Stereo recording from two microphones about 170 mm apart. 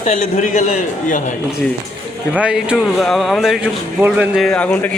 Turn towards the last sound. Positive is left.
turn(degrees=5)  # may be behind; listen again after turning